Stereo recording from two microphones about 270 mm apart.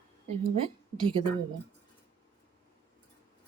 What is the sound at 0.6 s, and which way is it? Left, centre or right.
Speech, centre.